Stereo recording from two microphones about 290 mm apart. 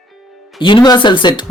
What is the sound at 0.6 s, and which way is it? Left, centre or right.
Speech, centre.